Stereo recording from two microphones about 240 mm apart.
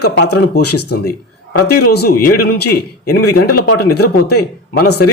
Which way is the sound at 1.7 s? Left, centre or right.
Left.